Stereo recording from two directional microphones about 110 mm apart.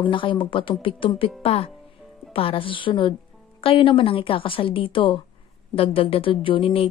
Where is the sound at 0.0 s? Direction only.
50° left (ahead or behind).